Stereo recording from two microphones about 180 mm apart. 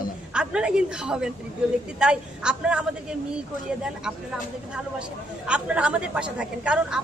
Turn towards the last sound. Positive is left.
turn(degrees=-5)  # may be behind; listen again after turning